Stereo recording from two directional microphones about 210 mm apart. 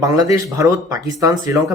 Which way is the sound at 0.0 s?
15° right (ahead or behind).